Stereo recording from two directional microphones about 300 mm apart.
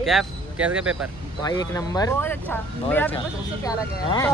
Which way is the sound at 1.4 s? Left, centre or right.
Centre.